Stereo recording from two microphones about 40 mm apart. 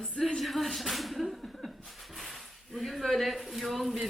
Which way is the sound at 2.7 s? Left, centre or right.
Centre.